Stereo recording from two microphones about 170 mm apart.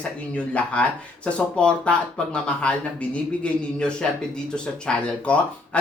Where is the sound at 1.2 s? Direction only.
5° left (ahead or behind).